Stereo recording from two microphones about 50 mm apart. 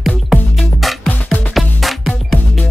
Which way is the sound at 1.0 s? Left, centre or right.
Left.